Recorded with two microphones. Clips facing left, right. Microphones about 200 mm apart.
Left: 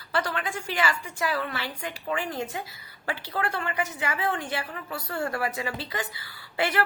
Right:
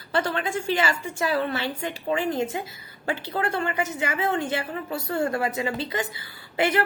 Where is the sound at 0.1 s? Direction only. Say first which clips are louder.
Right 4 dB; 25° right (ahead or behind).